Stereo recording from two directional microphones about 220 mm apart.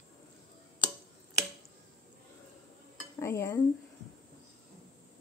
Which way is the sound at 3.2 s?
10° left (ahead or behind).